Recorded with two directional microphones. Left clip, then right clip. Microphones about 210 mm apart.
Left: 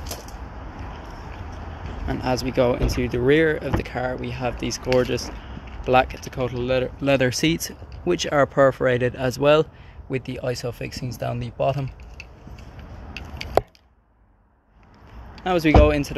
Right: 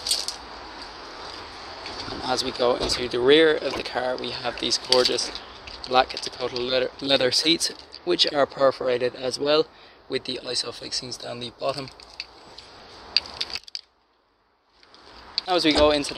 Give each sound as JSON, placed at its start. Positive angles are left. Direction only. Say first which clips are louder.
{"t": 2.3, "sound": "speech", "louder": "left 1 dB", "side_deg": -5}
{"t": 8.7, "sound": "speech", "louder": "left 3 dB", "side_deg": 15}
{"t": 15.4, "sound": "speech", "louder": "left 2 dB", "side_deg": 0}